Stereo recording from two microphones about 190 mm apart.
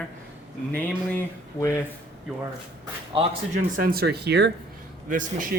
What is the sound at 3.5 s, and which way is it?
Speech, 50° right (ahead or behind).